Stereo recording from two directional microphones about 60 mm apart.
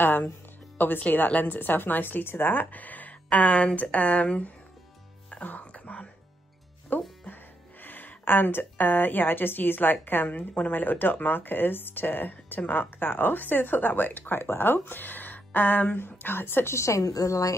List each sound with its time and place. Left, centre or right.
0.0 s speech: left
5.3 s music: left
6.9 s speech: left